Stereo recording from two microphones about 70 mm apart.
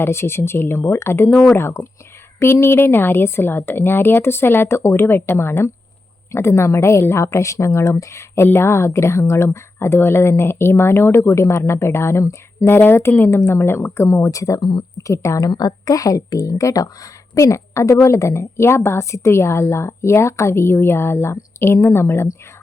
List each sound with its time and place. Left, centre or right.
0.0 s a woman's voice: left
15.5 s a woman's voice: left